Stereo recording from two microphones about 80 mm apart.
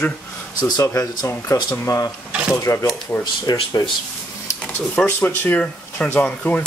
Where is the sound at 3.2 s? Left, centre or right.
Left.